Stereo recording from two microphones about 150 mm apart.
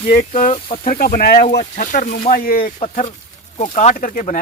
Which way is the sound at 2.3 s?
75° left (ahead or behind).